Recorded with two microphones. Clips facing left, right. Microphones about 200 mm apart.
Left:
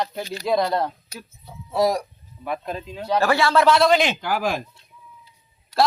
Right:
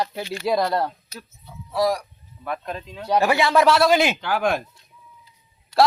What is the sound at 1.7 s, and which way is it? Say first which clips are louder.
Speech: left 1 dB; 25° left (ahead or behind).